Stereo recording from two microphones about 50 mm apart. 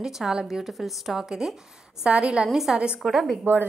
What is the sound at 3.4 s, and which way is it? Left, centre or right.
Speech, right.